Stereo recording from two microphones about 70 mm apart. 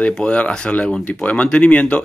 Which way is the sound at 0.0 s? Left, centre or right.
Centre.